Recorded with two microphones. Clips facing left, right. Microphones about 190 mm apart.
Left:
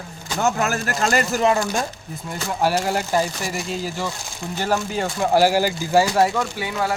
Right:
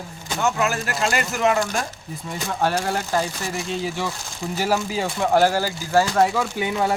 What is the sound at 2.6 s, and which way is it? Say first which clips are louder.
A man's voice: left 2 dB; 10° left (ahead or behind).